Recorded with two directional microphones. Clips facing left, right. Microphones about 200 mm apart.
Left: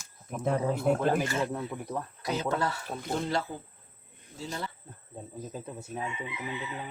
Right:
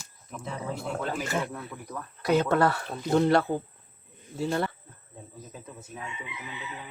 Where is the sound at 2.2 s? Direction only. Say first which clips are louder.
Right 8 dB; 60° right (ahead or behind).